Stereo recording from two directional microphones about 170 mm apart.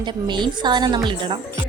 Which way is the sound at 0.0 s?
25° right (ahead or behind).